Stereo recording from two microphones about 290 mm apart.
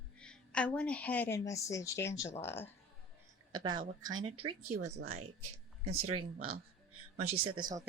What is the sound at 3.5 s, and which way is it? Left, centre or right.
Speech, centre.